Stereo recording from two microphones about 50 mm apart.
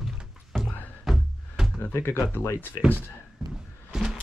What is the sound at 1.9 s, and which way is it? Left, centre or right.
Speech, left.